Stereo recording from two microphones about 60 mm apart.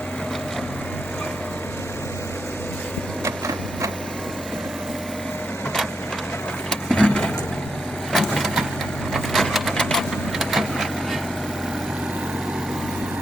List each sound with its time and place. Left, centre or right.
3.2 s sewing machine: right
6.7 s a sound: centre
8.1 s vehicle: centre
9.1 s a sound: centre
9.7 s vehicle: centre
10.3 s vehicle: centre